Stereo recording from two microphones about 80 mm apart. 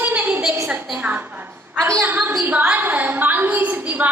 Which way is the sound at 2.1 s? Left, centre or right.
Right.